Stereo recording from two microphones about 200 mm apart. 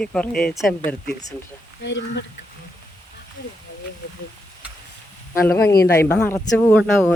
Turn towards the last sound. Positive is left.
turn(degrees=0)  # may be behind; listen again after turning